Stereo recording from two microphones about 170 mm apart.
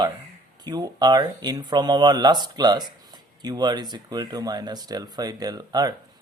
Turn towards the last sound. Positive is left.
turn(degrees=-20)  # may be behind; listen again after turning